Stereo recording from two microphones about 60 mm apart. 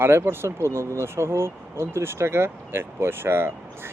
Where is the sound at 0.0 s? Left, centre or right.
Right.